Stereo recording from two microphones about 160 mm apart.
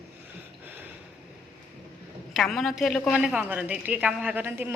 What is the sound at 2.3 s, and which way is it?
A woman's voice, centre (ahead or behind).